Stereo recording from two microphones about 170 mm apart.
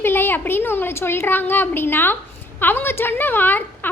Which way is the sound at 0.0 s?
15° left (ahead or behind).